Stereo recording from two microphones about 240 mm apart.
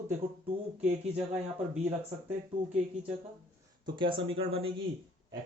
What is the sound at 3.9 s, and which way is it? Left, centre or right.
Speech, right.